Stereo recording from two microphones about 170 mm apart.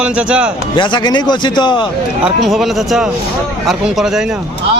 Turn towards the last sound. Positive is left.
turn(degrees=0)  # may be behind; listen again after turning